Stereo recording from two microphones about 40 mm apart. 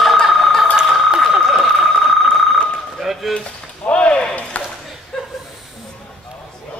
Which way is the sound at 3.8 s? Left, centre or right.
Left.